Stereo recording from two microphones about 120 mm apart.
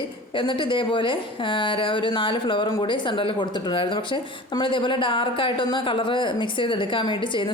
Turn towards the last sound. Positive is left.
turn(degrees=40)  # may be behind; listen again after turning